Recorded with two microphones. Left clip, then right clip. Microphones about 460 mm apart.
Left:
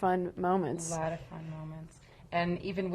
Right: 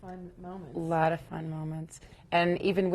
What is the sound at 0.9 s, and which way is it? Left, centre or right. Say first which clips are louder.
A woman's voice: right 8 dB; right.